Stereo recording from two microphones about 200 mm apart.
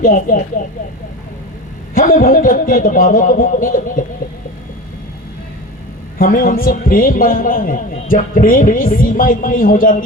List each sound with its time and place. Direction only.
0.0 s speech: 40° left (ahead or behind)
2.0 s speech: 40° left (ahead or behind)
6.1 s speech: 45° left (ahead or behind)